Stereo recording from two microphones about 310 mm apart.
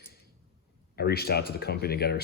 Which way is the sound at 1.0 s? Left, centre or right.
Left.